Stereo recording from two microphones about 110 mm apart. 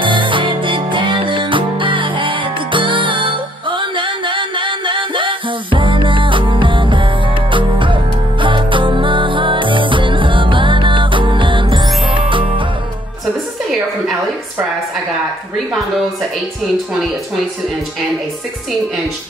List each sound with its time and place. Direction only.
0.0 s music: 50° right (ahead or behind)